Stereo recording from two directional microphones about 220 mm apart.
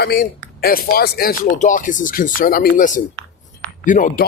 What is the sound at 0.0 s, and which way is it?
Speech, 40° left (ahead or behind).